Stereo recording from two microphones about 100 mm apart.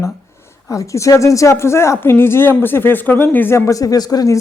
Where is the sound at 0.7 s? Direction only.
30° left (ahead or behind).